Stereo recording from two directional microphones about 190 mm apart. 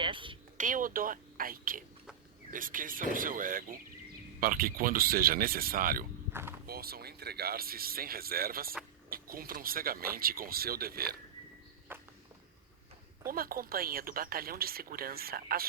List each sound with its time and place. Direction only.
0.0 s a sound: 25° right (ahead or behind)
0.5 s speech: 45° right (ahead or behind)
13.2 s speech: 50° right (ahead or behind)